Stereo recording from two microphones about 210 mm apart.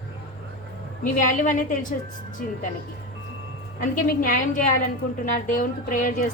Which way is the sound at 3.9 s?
40° left (ahead or behind).